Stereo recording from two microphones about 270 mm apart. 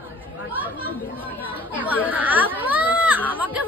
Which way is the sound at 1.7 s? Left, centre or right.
Centre.